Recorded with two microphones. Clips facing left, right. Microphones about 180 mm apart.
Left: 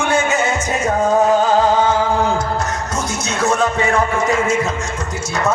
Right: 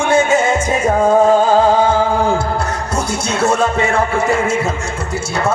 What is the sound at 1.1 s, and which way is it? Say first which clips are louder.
Music: right 3 dB; 30° right (ahead or behind).